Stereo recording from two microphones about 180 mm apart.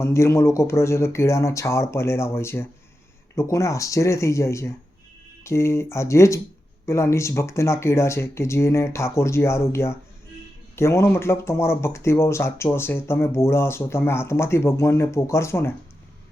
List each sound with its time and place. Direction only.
0.0 s speech: 15° left (ahead or behind)